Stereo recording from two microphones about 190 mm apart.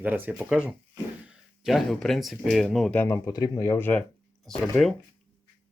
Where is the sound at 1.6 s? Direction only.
Centre (ahead or behind).